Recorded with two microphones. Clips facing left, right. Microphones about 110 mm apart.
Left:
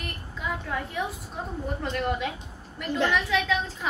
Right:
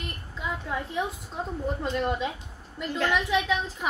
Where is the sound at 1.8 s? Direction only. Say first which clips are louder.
Even; 20° right (ahead or behind).